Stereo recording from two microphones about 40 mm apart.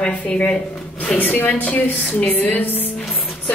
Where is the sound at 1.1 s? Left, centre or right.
Left.